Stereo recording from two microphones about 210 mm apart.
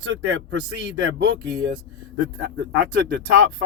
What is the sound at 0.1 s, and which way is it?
Speech, 65° right (ahead or behind).